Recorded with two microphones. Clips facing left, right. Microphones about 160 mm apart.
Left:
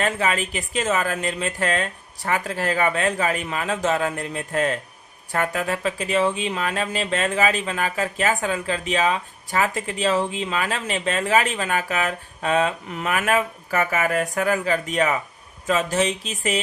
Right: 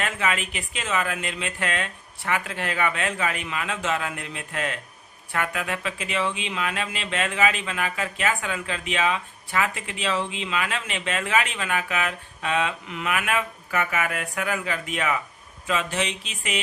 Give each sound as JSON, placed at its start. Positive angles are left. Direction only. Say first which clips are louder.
{"t": 0.0, "sound": "speech", "louder": "left 4 dB", "side_deg": 35}